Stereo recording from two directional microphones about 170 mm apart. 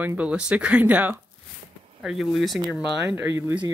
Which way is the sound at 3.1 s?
15° right (ahead or behind).